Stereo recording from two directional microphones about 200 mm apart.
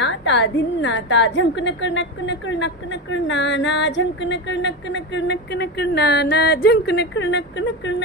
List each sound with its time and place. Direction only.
0.0 s a woman's voice: 65° left (ahead or behind)